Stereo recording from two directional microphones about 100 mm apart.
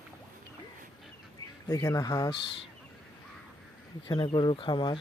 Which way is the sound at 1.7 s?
35° left (ahead or behind).